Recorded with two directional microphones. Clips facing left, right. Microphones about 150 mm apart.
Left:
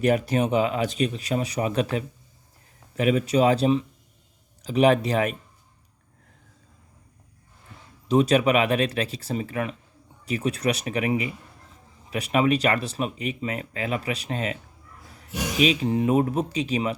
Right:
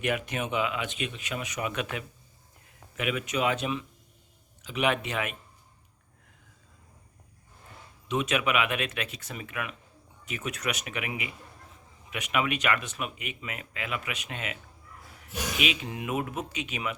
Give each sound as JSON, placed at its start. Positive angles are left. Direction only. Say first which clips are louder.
{"t": 0.0, "sound": "speech", "louder": "left 9 dB", "side_deg": 35}
{"t": 8.0, "sound": "speech", "louder": "left 9 dB", "side_deg": 35}